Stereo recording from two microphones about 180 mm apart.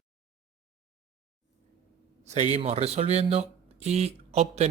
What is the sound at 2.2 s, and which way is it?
A man's voice, 40° right (ahead or behind).